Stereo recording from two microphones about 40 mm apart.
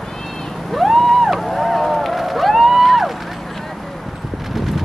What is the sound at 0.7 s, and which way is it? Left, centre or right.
Vehicle, centre.